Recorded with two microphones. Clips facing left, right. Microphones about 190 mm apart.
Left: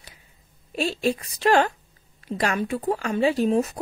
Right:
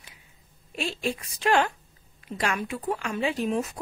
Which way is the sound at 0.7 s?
40° left (ahead or behind).